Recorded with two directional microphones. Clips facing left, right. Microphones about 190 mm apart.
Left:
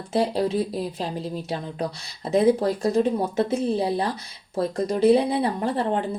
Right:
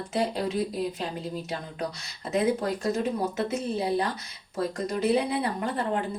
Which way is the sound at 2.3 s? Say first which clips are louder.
Left 6 dB; 30° left (ahead or behind).